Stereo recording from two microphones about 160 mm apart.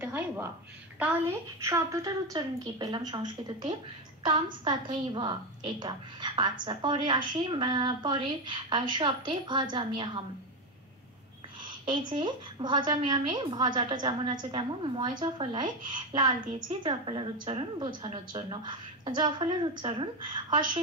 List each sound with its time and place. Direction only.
0.0 s a sound: 10° right (ahead or behind)
1.6 s a woman's voice: 20° right (ahead or behind)
11.9 s a woman's voice: 30° right (ahead or behind)